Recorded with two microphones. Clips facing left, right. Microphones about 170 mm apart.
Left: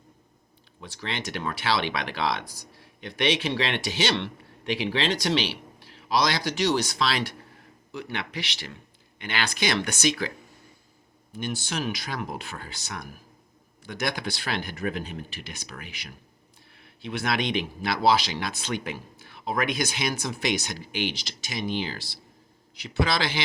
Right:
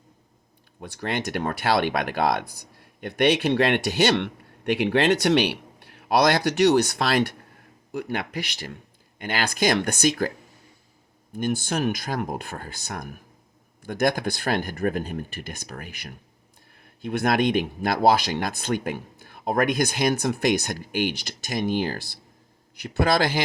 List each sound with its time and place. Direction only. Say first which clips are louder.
0.8 s speech: right 6 dB; 50° right (ahead or behind)
11.3 s speech: right 6 dB; 50° right (ahead or behind)